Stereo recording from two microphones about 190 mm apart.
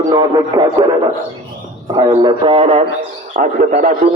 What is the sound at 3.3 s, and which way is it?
Speech, 45° right (ahead or behind).